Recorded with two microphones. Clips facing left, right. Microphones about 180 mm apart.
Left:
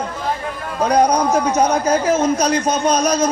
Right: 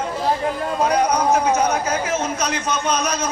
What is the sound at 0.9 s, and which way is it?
A man's voice, 35° left (ahead or behind).